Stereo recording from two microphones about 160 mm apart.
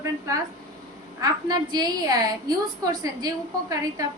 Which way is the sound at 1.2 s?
25° right (ahead or behind).